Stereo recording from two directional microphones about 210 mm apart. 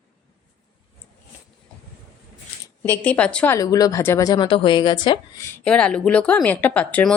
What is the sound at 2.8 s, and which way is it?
A woman's voice, 10° left (ahead or behind).